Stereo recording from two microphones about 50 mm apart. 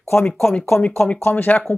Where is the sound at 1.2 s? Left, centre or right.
Left.